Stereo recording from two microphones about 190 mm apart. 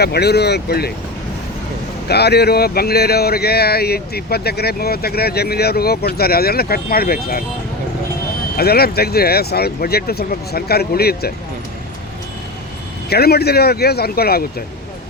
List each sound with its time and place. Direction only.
0.0 s speech: 60° left (ahead or behind)
2.0 s speech: 60° left (ahead or behind)
8.5 s speech: 55° left (ahead or behind)
13.1 s speech: 55° left (ahead or behind)